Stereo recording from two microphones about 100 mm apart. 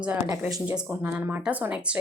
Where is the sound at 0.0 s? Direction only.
10° right (ahead or behind).